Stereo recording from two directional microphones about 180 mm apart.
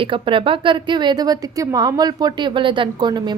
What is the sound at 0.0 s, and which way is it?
A woman's voice, 30° right (ahead or behind).